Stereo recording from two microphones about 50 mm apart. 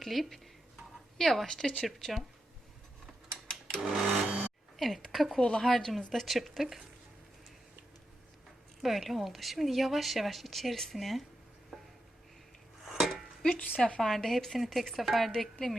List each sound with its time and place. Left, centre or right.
0.0 s speech: centre
3.9 s sewing machine: right
4.8 s speech: centre
5.4 s speech: centre
8.8 s speech: centre
12.8 s dishes: centre
13.5 s a woman's voice: left
14.0 s speech: centre